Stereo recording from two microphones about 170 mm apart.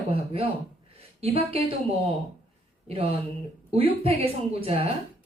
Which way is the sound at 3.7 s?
35° right (ahead or behind).